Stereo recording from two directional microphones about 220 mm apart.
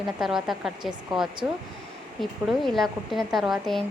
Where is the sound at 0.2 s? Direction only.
Centre (ahead or behind).